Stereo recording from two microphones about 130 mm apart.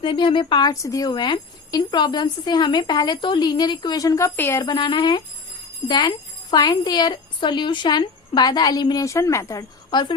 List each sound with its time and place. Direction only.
0.0 s speech: 40° left (ahead or behind); by 4.6 s 20° left (ahead or behind)
4.6 s speech: 35° left (ahead or behind)
9.9 s speech: 35° left (ahead or behind)